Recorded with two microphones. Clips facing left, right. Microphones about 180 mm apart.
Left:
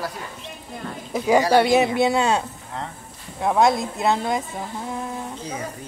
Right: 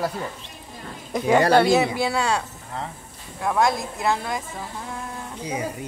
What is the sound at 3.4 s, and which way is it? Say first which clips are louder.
Speech: left 3 dB; 25° left (ahead or behind).